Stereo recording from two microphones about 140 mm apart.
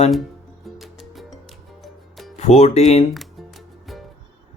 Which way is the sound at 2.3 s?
55° left (ahead or behind).